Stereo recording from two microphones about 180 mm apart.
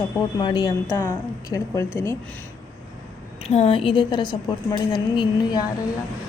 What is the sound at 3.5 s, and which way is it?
A woman's voice, 30° left (ahead or behind).